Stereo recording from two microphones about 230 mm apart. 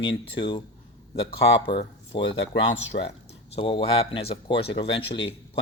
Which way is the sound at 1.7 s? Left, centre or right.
Left.